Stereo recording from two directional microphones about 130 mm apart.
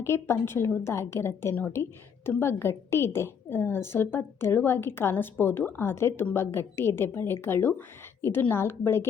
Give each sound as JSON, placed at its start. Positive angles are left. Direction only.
{"t": 0.0, "sound": "a woman's voice", "side_deg": 20}